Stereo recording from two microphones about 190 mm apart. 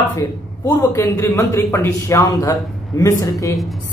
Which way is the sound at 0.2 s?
15° left (ahead or behind).